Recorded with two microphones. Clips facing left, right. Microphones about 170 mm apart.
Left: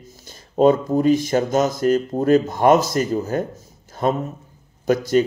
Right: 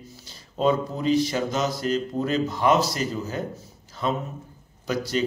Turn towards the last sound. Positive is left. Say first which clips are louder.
# left 9 dB
turn(degrees=50)  # may be behind; listen again after turning